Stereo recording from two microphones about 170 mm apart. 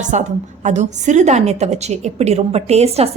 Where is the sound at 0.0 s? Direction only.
45° right (ahead or behind).